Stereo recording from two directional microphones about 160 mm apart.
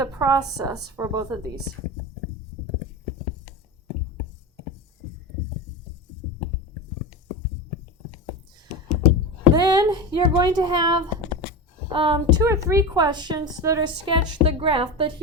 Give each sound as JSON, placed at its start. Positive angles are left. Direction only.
{"t": 0.0, "sound": "a woman's voice", "side_deg": -25}
{"t": 9.6, "sound": "a sound", "side_deg": -25}
{"t": 11.9, "sound": "a woman's voice", "side_deg": -30}